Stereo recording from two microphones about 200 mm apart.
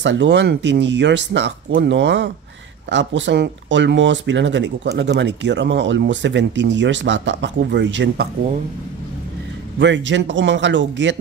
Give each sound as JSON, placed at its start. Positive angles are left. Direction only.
{"t": 0.0, "sound": "speech", "side_deg": -65}
{"t": 9.8, "sound": "speech", "side_deg": -65}